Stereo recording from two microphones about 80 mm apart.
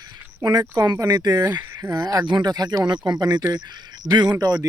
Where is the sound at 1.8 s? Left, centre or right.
Right.